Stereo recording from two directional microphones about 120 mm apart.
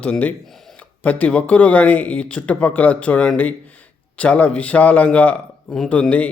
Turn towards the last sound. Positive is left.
turn(degrees=10)  # may be behind; listen again after turning